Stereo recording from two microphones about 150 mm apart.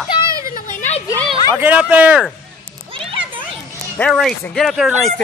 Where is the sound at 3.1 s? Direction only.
35° right (ahead or behind).